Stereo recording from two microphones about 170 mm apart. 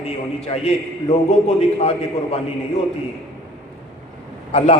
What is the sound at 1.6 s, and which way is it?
Speech, 40° left (ahead or behind).